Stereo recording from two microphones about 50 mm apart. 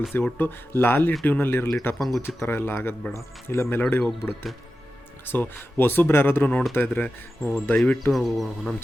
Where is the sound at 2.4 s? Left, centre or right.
Left.